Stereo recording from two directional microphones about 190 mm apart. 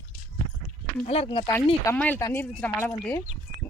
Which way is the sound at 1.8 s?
10° left (ahead or behind).